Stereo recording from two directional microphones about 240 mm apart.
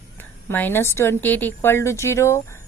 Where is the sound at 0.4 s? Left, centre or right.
Centre.